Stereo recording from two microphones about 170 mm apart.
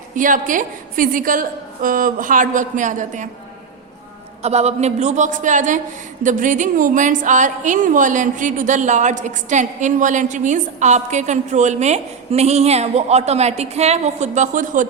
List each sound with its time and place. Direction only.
0.2 s a woman's voice: 50° right (ahead or behind)
4.4 s a woman's voice: 40° right (ahead or behind)